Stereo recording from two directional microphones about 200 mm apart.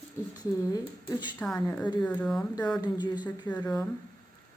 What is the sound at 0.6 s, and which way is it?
Speech, 15° left (ahead or behind).